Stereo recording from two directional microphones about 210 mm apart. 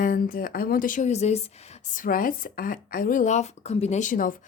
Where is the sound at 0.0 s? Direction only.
40° left (ahead or behind).